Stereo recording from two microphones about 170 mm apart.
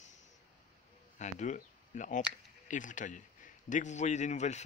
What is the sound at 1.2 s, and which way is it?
A man's voice, 45° left (ahead or behind).